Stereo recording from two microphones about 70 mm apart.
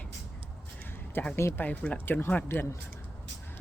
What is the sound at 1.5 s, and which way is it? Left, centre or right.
Speech, left.